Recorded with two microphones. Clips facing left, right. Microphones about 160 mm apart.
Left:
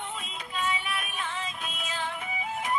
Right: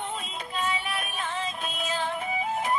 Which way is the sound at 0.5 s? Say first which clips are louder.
Right 1 dB; 35° right (ahead or behind).